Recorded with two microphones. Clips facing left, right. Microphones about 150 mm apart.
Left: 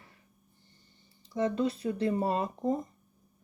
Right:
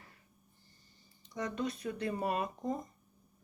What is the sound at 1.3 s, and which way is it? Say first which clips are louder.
A woman's voice: left 8 dB; 30° left (ahead or behind).